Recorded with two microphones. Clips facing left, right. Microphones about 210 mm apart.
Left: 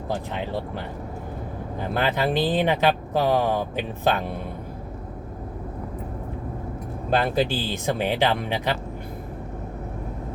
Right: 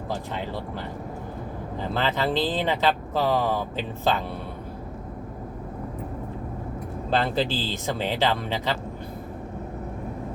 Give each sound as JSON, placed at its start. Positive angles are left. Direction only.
{"t": 1.8, "sound": "speech", "side_deg": 15}
{"t": 7.2, "sound": "speech", "side_deg": 15}